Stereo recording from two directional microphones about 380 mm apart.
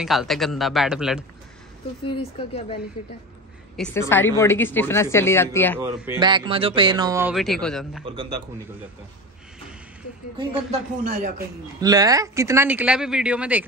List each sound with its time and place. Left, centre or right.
0.0 s speech: centre
2.0 s speech: centre
5.8 s speech: centre
10.3 s speech: centre
11.8 s speech: centre